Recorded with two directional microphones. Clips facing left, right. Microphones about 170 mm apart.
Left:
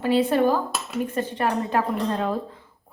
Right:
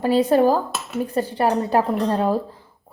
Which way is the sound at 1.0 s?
35° right (ahead or behind).